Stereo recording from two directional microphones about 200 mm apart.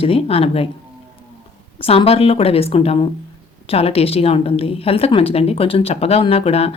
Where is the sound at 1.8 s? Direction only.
30° left (ahead or behind).